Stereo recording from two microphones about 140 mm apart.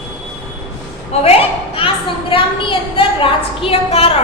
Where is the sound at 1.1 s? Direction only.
50° left (ahead or behind).